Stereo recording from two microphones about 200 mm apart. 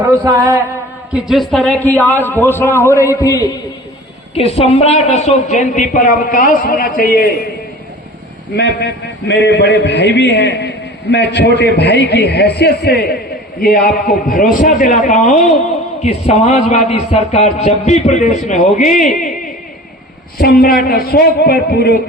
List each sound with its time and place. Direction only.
0.0 s a sound: 15° right (ahead or behind)
1.1 s a man's voice: centre (ahead or behind); by 3.5 s 15° left (ahead or behind)
4.4 s speech: 30° left (ahead or behind); by 7.5 s 50° left (ahead or behind)
8.5 s a man's voice: 60° left (ahead or behind); by 19.3 s 40° left (ahead or behind)
20.4 s speech: 50° left (ahead or behind)